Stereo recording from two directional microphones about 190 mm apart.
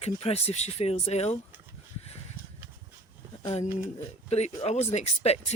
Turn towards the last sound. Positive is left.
turn(degrees=35)  # may be behind; listen again after turning